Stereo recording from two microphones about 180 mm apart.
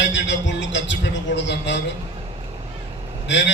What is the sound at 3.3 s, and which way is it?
Speech, 90° left.